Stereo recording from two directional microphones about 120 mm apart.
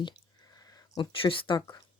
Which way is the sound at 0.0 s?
35° left (ahead or behind).